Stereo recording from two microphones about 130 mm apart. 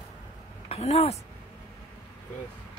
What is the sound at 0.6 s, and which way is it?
Speech, 50° left (ahead or behind).